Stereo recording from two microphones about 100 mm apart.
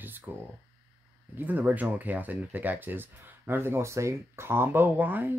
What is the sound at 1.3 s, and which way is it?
Speech, 15° right (ahead or behind).